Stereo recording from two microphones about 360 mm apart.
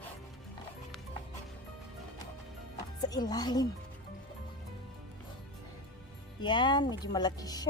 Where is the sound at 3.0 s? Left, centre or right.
Centre.